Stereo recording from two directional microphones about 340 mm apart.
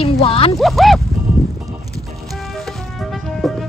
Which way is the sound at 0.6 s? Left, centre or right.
Centre.